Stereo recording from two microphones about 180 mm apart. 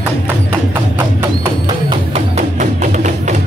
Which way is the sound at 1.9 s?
35° right (ahead or behind).